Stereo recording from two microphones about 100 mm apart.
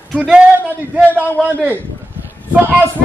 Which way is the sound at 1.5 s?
25° right (ahead or behind).